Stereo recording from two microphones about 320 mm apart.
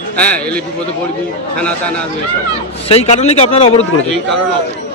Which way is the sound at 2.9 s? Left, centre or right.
Centre.